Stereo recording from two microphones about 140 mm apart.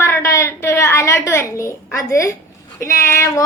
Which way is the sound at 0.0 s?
20° left (ahead or behind).